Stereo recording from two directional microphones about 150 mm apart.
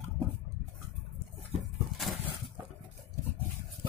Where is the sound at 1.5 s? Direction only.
45° right (ahead or behind).